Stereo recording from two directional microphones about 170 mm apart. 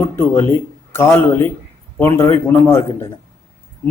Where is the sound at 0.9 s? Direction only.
15° left (ahead or behind).